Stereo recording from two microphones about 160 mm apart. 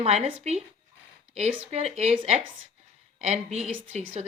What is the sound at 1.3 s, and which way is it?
A woman's voice, 45° right (ahead or behind).